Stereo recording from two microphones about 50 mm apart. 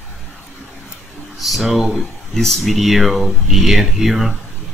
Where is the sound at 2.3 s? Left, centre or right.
Centre.